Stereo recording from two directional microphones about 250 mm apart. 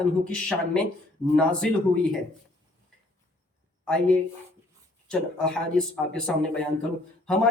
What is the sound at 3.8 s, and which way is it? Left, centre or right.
Speech, centre.